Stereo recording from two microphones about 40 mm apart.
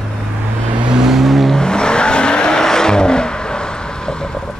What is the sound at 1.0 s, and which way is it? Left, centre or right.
Vehicle, centre.